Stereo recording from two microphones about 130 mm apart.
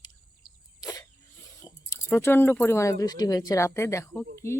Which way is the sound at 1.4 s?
25° left (ahead or behind).